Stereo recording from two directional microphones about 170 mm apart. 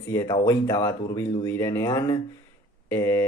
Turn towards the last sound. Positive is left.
turn(degrees=15)  # may be behind; listen again after turning